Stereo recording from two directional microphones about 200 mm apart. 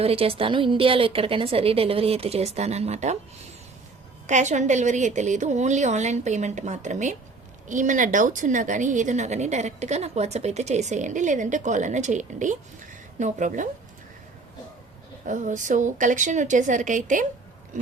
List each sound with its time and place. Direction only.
0.0 s a woman's voice: 30° right (ahead or behind)
4.3 s a woman's voice: 35° right (ahead or behind)
15.3 s a woman's voice: 40° right (ahead or behind)